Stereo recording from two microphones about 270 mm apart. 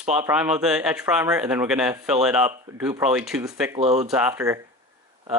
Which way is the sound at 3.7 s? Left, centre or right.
Right.